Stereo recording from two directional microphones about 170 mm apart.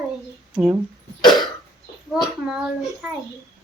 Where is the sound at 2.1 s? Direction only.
5° right (ahead or behind).